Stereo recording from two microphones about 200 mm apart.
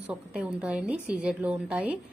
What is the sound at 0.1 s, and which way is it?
A woman's voice, 5° right (ahead or behind).